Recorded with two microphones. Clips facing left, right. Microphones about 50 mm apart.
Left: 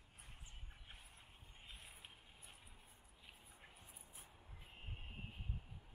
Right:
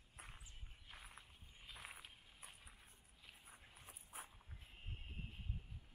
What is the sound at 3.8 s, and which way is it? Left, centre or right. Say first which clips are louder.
Dog: right 6 dB; right.